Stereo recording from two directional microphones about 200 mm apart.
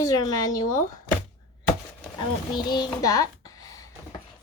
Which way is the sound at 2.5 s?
20° left (ahead or behind).